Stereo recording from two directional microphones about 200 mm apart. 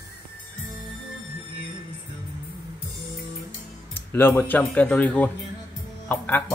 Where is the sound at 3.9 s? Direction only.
10° left (ahead or behind).